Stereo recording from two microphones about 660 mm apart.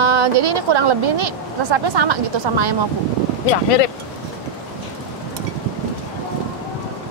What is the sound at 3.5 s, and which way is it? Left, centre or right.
Speech, left.